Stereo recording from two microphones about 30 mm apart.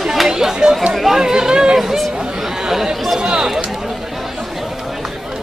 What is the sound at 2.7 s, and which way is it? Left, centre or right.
Chatter, centre.